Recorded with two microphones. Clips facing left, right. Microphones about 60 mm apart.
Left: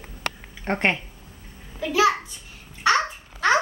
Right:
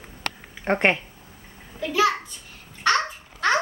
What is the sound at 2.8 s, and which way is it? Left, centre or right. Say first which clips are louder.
Babbling: left 1 dB; centre.